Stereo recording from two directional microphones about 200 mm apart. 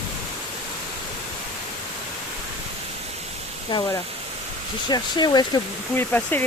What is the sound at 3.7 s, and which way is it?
Speech, 25° left (ahead or behind).